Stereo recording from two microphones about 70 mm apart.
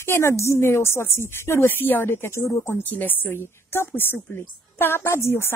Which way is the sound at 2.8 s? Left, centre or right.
Left.